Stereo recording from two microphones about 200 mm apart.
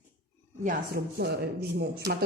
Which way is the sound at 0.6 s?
50° right (ahead or behind).